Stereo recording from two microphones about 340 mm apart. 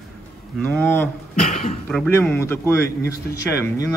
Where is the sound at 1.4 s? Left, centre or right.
Left.